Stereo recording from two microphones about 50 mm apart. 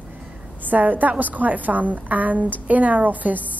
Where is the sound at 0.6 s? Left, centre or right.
Right.